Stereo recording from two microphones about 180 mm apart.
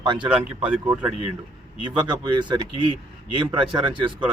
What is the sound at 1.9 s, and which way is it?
Speech, 25° right (ahead or behind).